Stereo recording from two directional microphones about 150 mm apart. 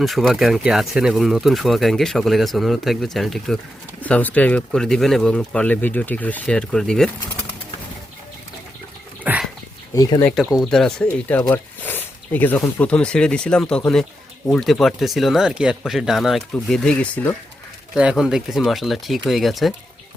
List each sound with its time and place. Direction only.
0.0 s speech: centre (ahead or behind)
9.2 s dog: 10° right (ahead or behind)
9.9 s speech: 25° left (ahead or behind)
10.5 s speech: centre (ahead or behind)
11.5 s a sound: 10° left (ahead or behind)
12.9 s speech: 5° left (ahead or behind)
17.9 s speech: 5° right (ahead or behind)